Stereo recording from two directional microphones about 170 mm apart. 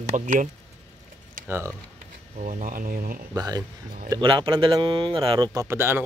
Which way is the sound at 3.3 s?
20° right (ahead or behind).